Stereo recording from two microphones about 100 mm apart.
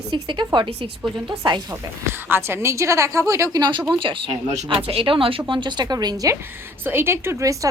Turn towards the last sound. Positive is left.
turn(degrees=-30)  # may be behind; listen again after turning